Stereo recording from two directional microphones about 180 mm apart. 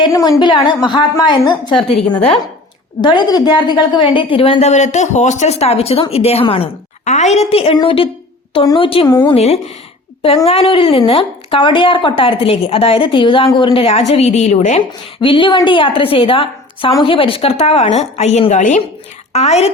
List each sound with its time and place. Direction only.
0.0 s speech: 20° left (ahead or behind)
2.0 s speech: 5° left (ahead or behind)
3.0 s speech: 25° left (ahead or behind)